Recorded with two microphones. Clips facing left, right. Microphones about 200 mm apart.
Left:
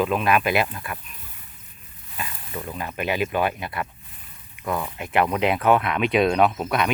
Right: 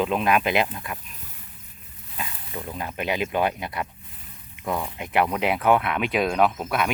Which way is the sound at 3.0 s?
20° right (ahead or behind).